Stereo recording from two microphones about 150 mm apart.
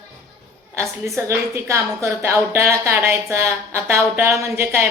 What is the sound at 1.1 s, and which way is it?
A woman's voice, 20° right (ahead or behind).